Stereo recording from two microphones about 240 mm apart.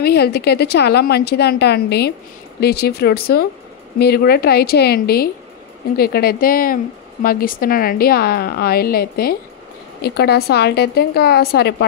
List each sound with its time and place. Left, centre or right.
0.0 s a woman's voice: left